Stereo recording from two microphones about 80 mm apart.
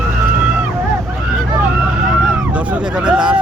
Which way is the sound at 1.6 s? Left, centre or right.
Right.